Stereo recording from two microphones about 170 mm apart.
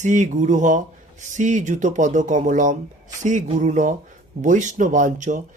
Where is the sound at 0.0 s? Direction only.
45° right (ahead or behind).